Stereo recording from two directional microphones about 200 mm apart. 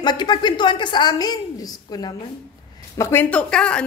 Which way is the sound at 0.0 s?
20° left (ahead or behind).